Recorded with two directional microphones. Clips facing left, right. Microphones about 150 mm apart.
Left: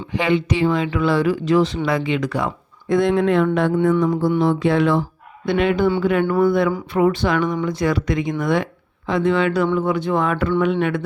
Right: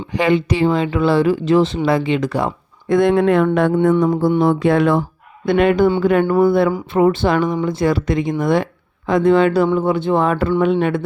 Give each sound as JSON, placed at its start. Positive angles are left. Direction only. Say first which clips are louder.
{"t": 0.1, "sound": "speech", "louder": "right 3 dB", "side_deg": -40}
{"t": 2.9, "sound": "speech", "louder": "right 3 dB", "side_deg": -55}
{"t": 4.0, "sound": "music", "louder": "right 3 dB", "side_deg": -45}
{"t": 6.4, "sound": "speech", "louder": "right 3 dB", "side_deg": -35}
{"t": 9.0, "sound": "speech", "louder": "right 5 dB", "side_deg": -45}